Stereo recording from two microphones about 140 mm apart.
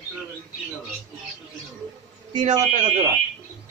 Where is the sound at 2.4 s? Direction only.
55° right (ahead or behind).